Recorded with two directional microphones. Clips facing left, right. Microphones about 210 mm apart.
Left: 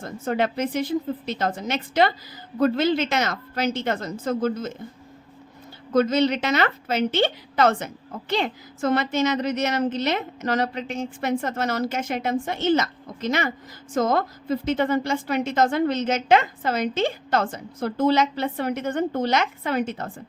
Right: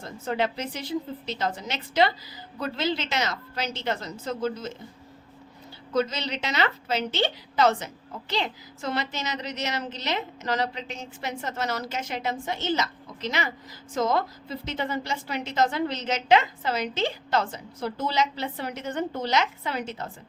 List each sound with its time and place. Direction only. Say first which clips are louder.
0.0 s a woman's voice: left 3 dB; 50° left (ahead or behind)
5.9 s a woman's voice: left 7 dB; 50° left (ahead or behind)